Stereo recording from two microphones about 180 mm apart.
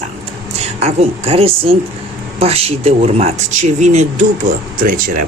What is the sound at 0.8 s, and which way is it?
Speech, 35° right (ahead or behind).